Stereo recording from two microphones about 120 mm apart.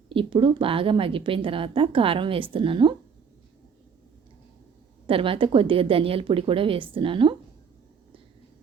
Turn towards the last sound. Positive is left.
turn(degrees=-45)  # may be behind; listen again after turning